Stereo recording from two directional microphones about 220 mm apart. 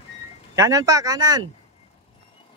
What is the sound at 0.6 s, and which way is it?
Speech, 15° right (ahead or behind).